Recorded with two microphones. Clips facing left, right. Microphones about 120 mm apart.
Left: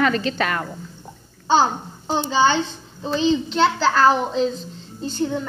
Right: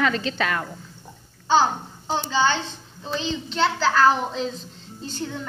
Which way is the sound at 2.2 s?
15° left (ahead or behind).